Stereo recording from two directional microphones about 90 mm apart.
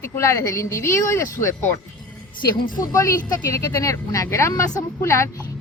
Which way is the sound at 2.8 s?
35° left (ahead or behind).